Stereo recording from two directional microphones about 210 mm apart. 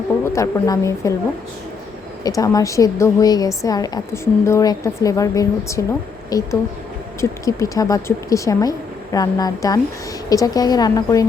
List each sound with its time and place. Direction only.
0.3 s a woman's voice: 15° left (ahead or behind)
2.2 s a woman's voice: 15° left (ahead or behind)